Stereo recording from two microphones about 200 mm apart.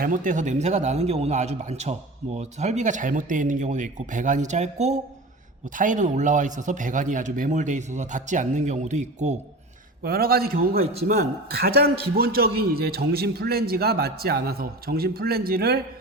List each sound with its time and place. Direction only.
0.0 s a man's voice: 40° right (ahead or behind)
10.0 s a man's voice: 50° right (ahead or behind)
10.8 s a man's voice: 30° right (ahead or behind)
11.1 s a man's voice: 50° right (ahead or behind)